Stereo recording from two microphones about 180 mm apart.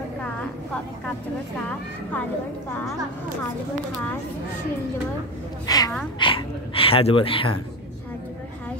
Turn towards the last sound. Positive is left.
turn(degrees=30)  # may be behind; listen again after turning